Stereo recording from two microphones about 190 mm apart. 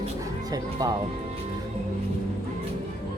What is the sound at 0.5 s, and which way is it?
Speech, 20° right (ahead or behind).